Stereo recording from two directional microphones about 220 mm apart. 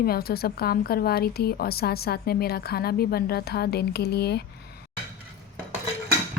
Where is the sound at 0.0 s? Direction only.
45° left (ahead or behind).